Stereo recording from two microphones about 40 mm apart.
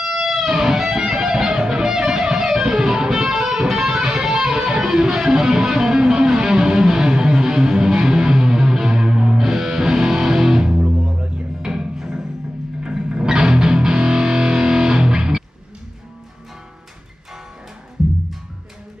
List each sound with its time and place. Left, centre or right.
0.0 s music: centre; by 11.4 s right
11.6 s music: centre